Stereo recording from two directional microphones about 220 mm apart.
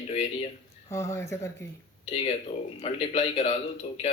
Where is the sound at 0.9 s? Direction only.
15° left (ahead or behind).